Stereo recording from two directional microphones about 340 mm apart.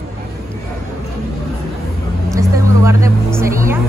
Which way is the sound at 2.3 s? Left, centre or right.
Centre.